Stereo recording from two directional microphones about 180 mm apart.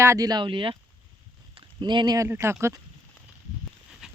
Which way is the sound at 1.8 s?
25° right (ahead or behind).